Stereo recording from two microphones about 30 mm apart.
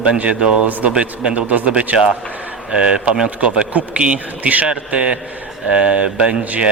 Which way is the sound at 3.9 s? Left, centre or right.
Right.